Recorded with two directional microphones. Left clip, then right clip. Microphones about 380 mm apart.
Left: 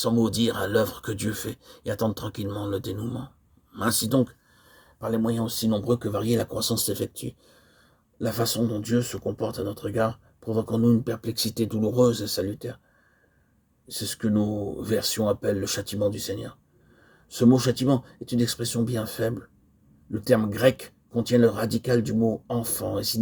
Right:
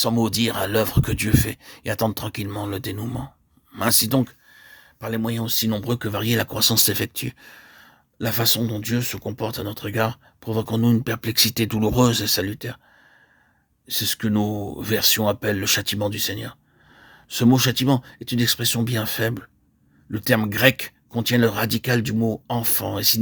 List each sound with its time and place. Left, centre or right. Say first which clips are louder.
0.0 s speech: right 2 dB; centre
13.8 s speech: right 6 dB; right
14.5 s speech: right 1 dB; right
14.8 s speech: right 6 dB; right